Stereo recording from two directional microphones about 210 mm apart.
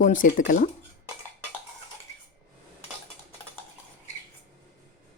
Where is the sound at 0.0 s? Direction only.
40° left (ahead or behind).